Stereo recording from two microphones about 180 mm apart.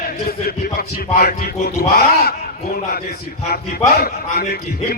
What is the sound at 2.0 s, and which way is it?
Speech, 55° left (ahead or behind).